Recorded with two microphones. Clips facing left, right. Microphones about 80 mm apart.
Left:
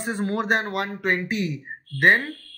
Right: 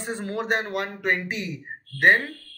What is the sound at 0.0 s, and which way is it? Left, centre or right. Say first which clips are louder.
Speech: left 4 dB; left.